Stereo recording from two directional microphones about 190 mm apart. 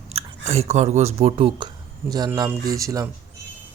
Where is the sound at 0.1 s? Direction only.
35° right (ahead or behind); by 3.1 s 20° right (ahead or behind).